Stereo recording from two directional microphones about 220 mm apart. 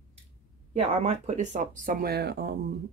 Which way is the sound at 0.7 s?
30° right (ahead or behind).